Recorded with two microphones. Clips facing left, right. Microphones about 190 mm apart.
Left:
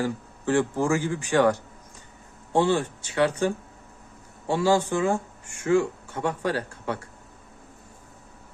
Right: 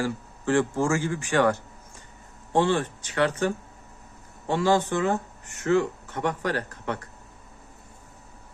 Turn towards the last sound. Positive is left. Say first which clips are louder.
# left 1 dB
turn(degrees=10)  # may be behind; listen again after turning